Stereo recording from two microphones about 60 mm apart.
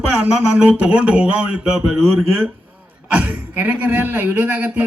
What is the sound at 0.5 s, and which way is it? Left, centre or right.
A man's voice, right.